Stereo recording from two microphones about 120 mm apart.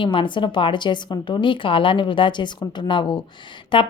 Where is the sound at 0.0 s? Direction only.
45° left (ahead or behind).